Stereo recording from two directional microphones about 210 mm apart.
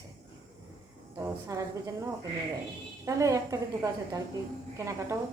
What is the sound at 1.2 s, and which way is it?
Speech, 15° right (ahead or behind).